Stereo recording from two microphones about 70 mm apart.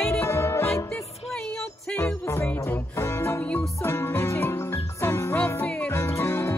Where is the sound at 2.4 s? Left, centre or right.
Left.